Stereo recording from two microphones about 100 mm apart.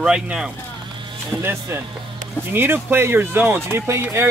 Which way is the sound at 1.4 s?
25° right (ahead or behind).